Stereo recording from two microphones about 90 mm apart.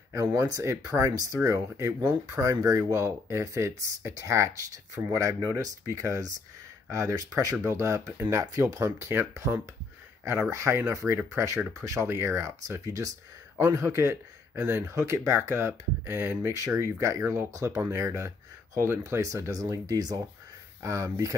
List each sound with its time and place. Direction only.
0.1 s speech: 35° right (ahead or behind)
6.9 s speech: 35° right (ahead or behind)